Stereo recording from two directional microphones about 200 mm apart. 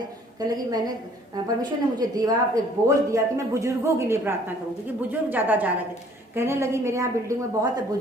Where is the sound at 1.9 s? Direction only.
20° right (ahead or behind).